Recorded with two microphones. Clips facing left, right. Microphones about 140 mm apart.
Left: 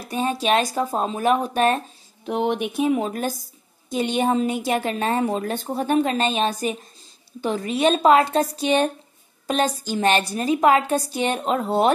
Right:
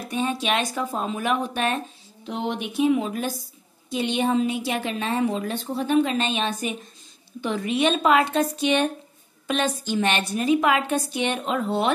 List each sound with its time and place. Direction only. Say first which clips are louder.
0.0 s a woman's voice: left 2 dB; 35° left (ahead or behind)
2.2 s a woman's voice: left 5 dB; 55° left (ahead or behind)